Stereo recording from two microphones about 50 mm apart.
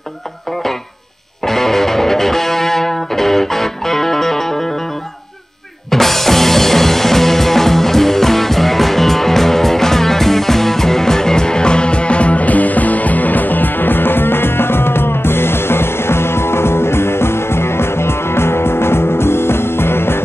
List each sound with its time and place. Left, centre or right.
1.4 s music: centre
5.9 s music: centre; by 20.2 s left